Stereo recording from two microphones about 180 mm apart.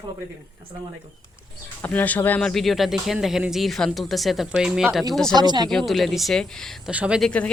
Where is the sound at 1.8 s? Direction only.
10° left (ahead or behind).